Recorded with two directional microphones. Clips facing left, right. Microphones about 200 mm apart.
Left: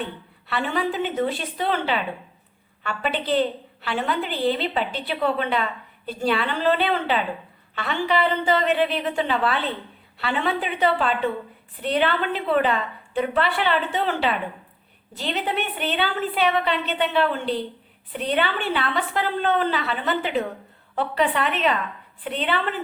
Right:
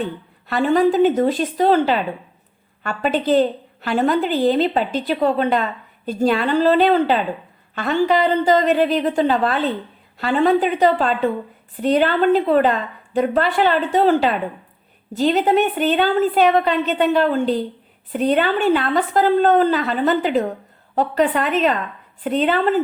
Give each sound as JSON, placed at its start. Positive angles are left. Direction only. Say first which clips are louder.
{"t": 0.0, "sound": "a woman's voice", "louder": "right 6 dB", "side_deg": -45}